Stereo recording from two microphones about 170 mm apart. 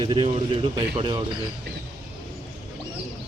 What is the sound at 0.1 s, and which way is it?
Speech, 30° right (ahead or behind).